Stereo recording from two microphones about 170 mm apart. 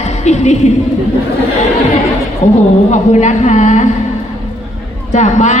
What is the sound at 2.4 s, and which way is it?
A woman's voice, 40° left (ahead or behind).